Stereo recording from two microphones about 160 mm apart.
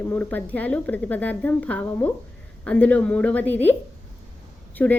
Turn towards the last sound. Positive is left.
turn(degrees=10)  # may be behind; listen again after turning